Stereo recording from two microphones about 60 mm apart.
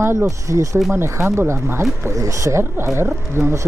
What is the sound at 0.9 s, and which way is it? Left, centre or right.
Speech, right.